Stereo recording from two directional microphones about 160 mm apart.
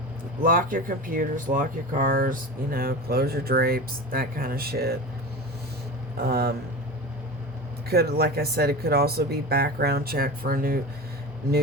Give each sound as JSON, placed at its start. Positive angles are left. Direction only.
{"t": 0.4, "sound": "speech", "side_deg": -60}
{"t": 6.1, "sound": "speech", "side_deg": -80}
{"t": 7.9, "sound": "speech", "side_deg": -75}